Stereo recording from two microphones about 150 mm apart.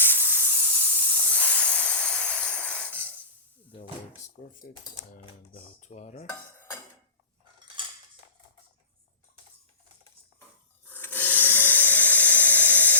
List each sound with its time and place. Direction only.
0.0 s steam: 15° left (ahead or behind)
4.4 s speech: 70° left (ahead or behind)
5.1 s dishes: 55° left (ahead or behind)
10.8 s a sound: 15° left (ahead or behind)